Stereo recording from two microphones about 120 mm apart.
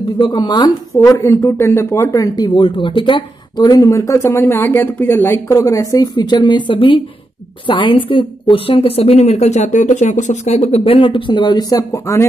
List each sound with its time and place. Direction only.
0.2 s a woman's voice: 35° left (ahead or behind)